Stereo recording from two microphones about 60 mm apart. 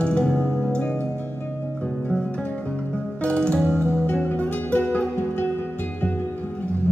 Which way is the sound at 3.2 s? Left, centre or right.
Centre.